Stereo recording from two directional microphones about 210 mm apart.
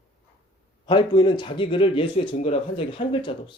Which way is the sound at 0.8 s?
20° left (ahead or behind).